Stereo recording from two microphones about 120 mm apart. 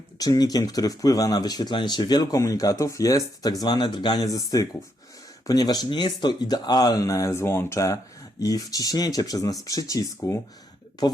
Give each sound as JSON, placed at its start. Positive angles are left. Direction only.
{"t": 0.2, "sound": "speech", "side_deg": 35}